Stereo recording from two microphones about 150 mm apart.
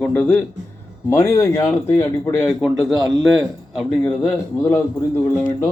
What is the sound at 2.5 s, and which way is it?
Speech, centre (ahead or behind).